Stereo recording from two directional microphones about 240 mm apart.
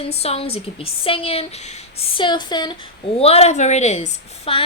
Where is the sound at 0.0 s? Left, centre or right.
Left.